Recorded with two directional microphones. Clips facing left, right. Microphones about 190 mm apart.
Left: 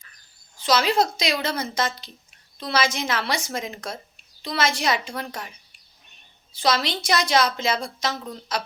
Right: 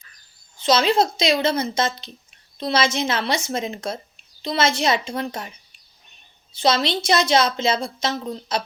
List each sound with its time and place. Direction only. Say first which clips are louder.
0.6 s a woman's voice: right 3 dB; 25° right (ahead or behind)
6.5 s a woman's voice: right 3 dB; 25° right (ahead or behind)